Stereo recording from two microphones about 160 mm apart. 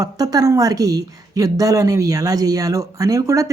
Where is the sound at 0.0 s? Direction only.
25° right (ahead or behind).